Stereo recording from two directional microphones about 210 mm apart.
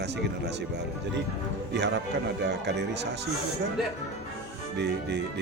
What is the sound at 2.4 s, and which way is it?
Speech, 55° right (ahead or behind).